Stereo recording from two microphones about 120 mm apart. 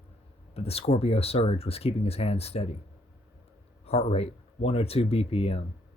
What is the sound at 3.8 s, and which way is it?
Speech, 60° left (ahead or behind).